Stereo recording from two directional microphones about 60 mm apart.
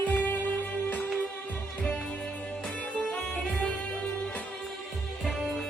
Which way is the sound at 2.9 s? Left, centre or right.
Centre.